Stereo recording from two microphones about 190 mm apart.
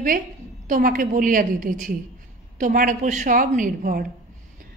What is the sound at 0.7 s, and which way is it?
A woman's voice, 45° right (ahead or behind).